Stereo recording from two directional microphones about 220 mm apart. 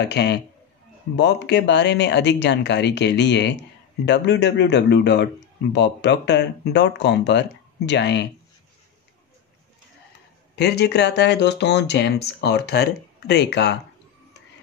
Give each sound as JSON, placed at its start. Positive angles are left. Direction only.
{"t": 0.0, "sound": "speech", "side_deg": 50}
{"t": 10.5, "sound": "speech", "side_deg": 50}